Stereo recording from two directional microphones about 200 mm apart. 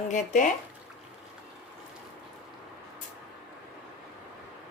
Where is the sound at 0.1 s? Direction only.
40° left (ahead or behind).